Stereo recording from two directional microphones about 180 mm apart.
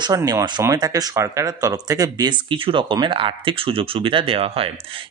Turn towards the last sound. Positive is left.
turn(degrees=-30)  # may be behind; listen again after turning